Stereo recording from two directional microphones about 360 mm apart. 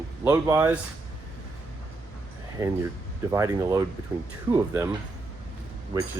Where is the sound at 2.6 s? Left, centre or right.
Centre.